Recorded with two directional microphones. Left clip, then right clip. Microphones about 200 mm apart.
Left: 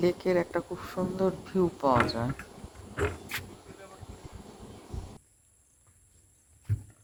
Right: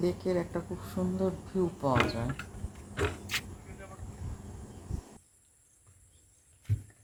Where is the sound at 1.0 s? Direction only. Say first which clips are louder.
Left 3 dB; 25° left (ahead or behind).